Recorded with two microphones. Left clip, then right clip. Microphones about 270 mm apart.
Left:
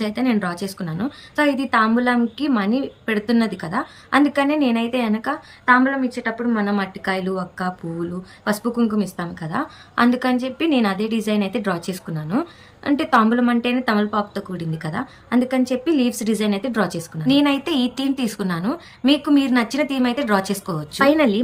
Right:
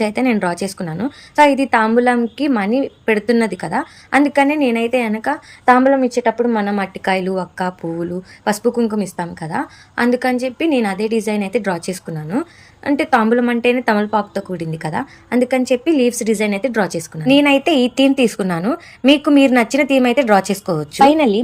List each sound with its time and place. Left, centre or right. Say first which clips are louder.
0.0 s a woman's voice: right 5 dB; centre